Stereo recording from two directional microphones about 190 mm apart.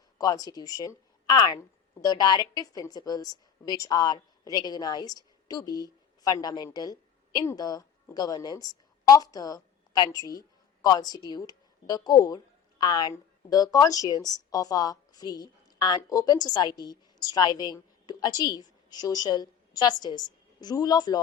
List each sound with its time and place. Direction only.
0.2 s a woman's voice: 20° left (ahead or behind)